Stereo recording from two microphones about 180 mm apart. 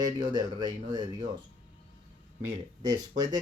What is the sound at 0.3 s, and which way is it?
Speech, 25° right (ahead or behind).